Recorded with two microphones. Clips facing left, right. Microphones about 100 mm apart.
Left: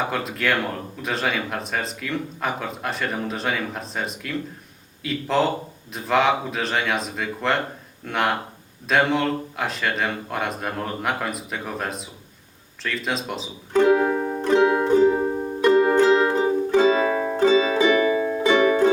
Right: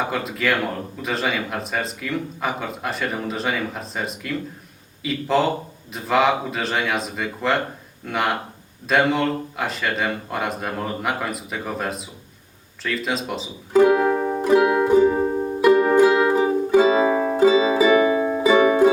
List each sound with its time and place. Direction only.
0.1 s a man's voice: centre (ahead or behind)
12.8 s music: centre (ahead or behind)